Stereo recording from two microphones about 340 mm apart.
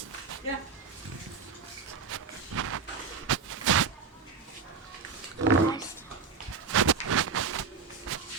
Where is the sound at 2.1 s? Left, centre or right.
Right.